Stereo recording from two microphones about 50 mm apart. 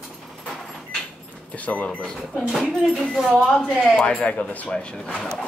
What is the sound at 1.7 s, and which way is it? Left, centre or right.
Speech, left.